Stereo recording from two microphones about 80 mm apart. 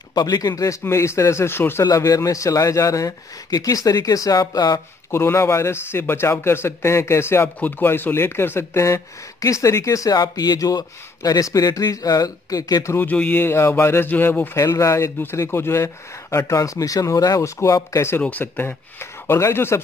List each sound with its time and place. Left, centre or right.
0.1 s speech: left
0.8 s speech: left
1.9 s a man's voice: left
5.1 s speech: left
10.1 s a man's voice: left
13.0 s speech: centre; by 18.0 s left
18.4 s speech: left